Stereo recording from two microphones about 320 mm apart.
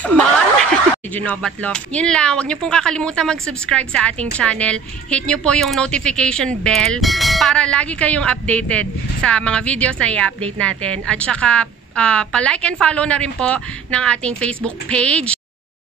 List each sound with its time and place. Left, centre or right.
1.1 s speech: centre